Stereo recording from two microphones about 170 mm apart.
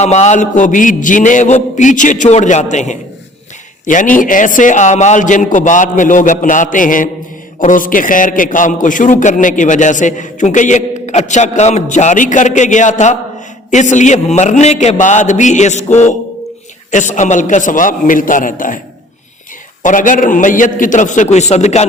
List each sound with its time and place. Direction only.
0.0 s a man's voice: 40° left (ahead or behind)
19.8 s a man's voice: 50° left (ahead or behind)